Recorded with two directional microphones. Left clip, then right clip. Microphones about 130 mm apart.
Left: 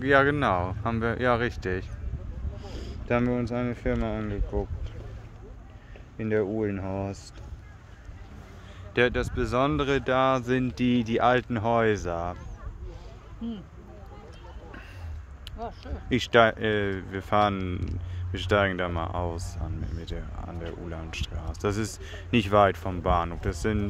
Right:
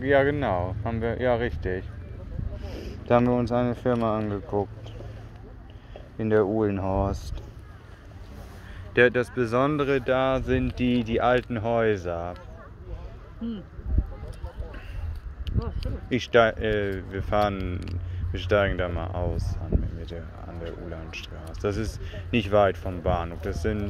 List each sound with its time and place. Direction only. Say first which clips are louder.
0.0 s speech: even; 65° left (ahead or behind)
2.6 s a sound: right 2 dB; 20° left (ahead or behind)
3.1 s speech: right 5 dB; 10° left (ahead or behind)
6.1 s speech: right 4 dB; centre (ahead or behind)
8.9 s a man's voice: right 4 dB; 10° left (ahead or behind)
9.8 s speech: even; 40° left (ahead or behind)
16.1 s speech: even; 45° left (ahead or behind)